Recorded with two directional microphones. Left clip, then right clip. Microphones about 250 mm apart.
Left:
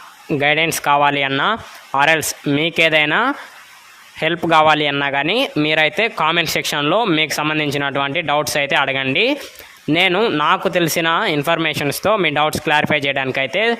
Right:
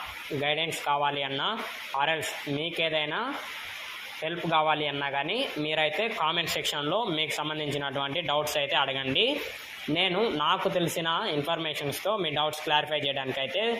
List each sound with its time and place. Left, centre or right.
0.4 s a man's voice: left